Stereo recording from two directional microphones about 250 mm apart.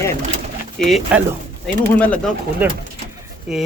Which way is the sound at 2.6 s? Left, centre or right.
Centre.